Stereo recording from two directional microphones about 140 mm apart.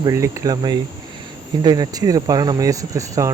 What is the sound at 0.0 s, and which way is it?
Speech, 20° right (ahead or behind).